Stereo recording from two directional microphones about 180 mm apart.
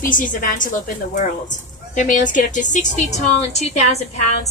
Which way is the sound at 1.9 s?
45° left (ahead or behind).